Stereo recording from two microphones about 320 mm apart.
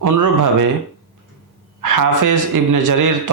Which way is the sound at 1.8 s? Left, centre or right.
Right.